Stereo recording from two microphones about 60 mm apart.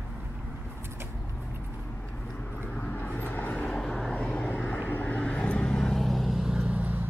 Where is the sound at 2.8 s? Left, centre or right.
Left; by 6.6 s centre.